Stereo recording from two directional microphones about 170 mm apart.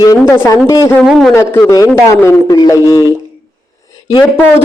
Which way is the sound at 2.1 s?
5° left (ahead or behind).